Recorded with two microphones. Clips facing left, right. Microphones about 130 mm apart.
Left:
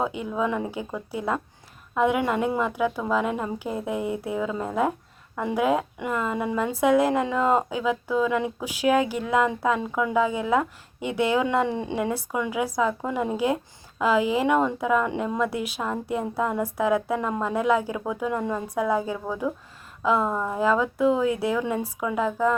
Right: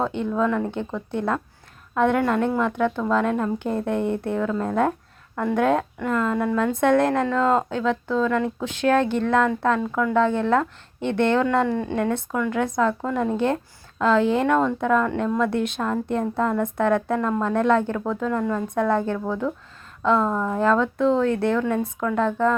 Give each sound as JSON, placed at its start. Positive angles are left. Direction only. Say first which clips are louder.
{"t": 0.0, "sound": "a woman's voice", "louder": "right 3 dB", "side_deg": 5}